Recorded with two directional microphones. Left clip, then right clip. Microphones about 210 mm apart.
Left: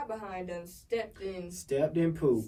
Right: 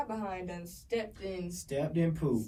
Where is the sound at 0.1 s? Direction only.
Centre (ahead or behind).